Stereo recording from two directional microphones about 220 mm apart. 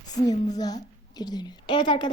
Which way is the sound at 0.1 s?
15° left (ahead or behind).